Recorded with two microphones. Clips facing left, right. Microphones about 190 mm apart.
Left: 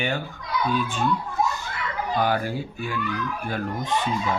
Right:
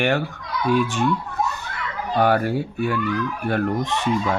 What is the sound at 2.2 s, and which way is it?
Speech, 60° right (ahead or behind).